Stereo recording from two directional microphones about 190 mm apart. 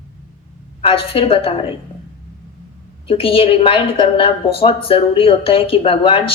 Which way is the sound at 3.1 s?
30° left (ahead or behind).